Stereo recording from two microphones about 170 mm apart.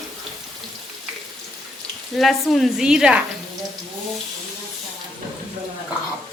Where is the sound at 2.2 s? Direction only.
Centre (ahead or behind).